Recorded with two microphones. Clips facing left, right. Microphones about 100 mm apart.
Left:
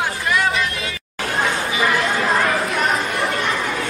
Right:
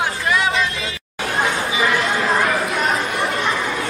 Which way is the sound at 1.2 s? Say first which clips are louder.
Right 1 dB; 5° right (ahead or behind).